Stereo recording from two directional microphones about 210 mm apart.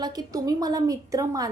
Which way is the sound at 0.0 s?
15° right (ahead or behind).